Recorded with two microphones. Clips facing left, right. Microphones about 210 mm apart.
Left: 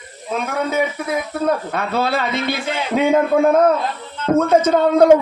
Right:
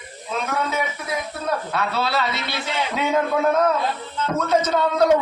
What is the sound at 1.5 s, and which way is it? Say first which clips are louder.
A man's voice: left 2 dB; 50° left (ahead or behind).